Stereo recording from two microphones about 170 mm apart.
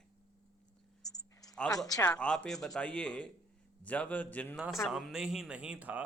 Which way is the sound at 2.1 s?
5° left (ahead or behind).